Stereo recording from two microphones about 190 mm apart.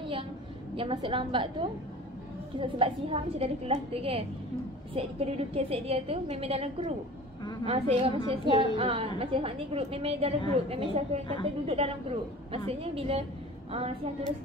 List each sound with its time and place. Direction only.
0.7 s a woman's voice: 30° right (ahead or behind)